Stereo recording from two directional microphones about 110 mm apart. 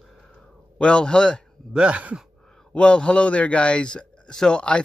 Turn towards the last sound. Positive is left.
turn(degrees=10)  # may be behind; listen again after turning